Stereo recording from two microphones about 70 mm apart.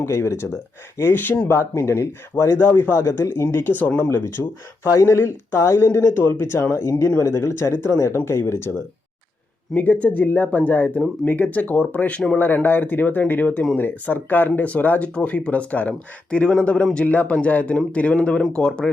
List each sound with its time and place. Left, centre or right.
0.0 s speech: left
1.5 s a man's voice: left; by 4.5 s centre
4.9 s speech: left
9.7 s speech: left
12.4 s a man's voice: left; by 18.9 s centre